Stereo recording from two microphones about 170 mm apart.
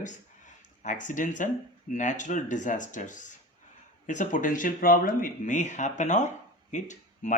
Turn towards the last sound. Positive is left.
turn(degrees=45)  # may be behind; listen again after turning